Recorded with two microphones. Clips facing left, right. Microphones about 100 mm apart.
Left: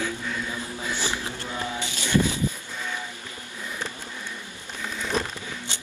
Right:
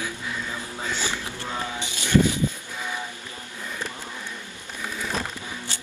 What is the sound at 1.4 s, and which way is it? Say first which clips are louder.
Music: even; 20° right (ahead or behind).